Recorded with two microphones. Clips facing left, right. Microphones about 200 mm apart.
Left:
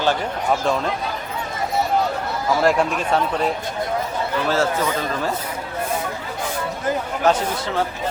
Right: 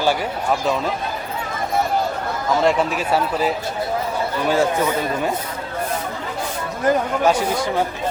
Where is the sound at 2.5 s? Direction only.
Centre (ahead or behind).